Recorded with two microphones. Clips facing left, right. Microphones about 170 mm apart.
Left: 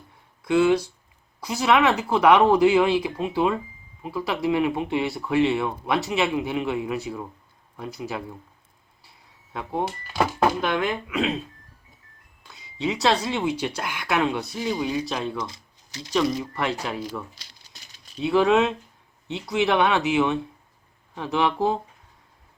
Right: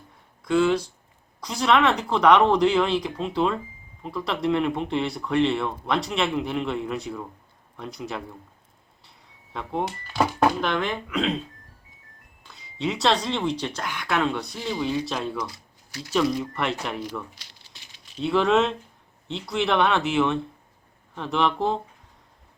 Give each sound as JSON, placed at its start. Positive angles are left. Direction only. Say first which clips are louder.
{"t": 0.4, "sound": "speech", "louder": "left 2 dB", "side_deg": 10}
{"t": 9.5, "sound": "speech", "louder": "left 1 dB", "side_deg": 5}
{"t": 12.4, "sound": "speech", "louder": "left 1 dB", "side_deg": 0}
{"t": 15.0, "sound": "speech", "louder": "even", "side_deg": 0}
{"t": 15.4, "sound": "typing", "louder": "even", "side_deg": 20}
{"t": 16.1, "sound": "speech", "louder": "even", "side_deg": 0}
{"t": 17.6, "sound": "rattle", "louder": "even", "side_deg": 40}
{"t": 18.2, "sound": "speech", "louder": "left 2 dB", "side_deg": 0}